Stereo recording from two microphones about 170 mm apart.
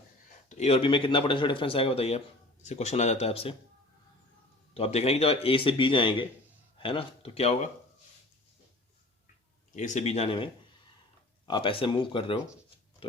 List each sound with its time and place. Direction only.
0.4 s speech: 40° left (ahead or behind)
4.7 s speech: 35° left (ahead or behind)
9.7 s speech: 45° left (ahead or behind)
13.0 s pig: 30° left (ahead or behind)